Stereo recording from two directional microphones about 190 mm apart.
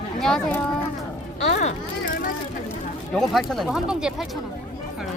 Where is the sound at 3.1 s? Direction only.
Centre (ahead or behind).